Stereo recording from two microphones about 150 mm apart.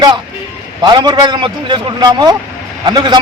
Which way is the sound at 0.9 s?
30° right (ahead or behind).